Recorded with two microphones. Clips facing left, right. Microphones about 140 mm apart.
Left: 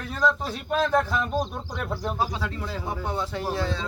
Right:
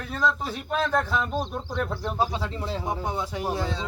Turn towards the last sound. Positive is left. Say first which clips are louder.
# left 1 dB
turn(degrees=-15)  # may be behind; listen again after turning